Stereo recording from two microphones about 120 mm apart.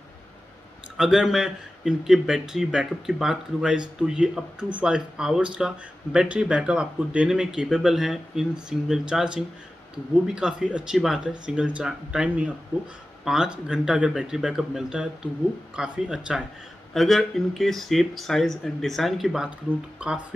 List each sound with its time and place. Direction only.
0.9 s speech: 5° right (ahead or behind)